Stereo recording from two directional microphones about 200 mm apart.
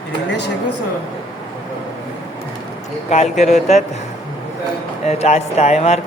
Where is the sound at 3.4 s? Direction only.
35° left (ahead or behind).